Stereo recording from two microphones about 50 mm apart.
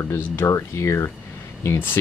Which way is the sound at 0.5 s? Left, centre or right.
Left.